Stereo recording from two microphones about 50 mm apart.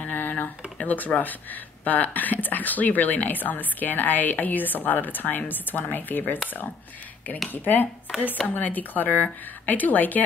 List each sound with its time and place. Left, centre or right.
0.0 s speech: left
7.5 s speech: left